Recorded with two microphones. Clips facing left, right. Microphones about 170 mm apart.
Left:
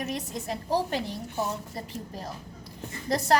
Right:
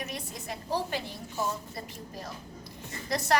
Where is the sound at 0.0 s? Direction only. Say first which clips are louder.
Left 6 dB; 35° left (ahead or behind).